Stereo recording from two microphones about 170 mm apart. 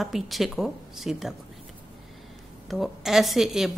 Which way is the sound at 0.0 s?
Centre (ahead or behind).